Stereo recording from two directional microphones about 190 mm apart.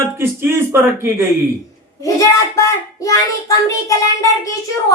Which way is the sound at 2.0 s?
15° left (ahead or behind).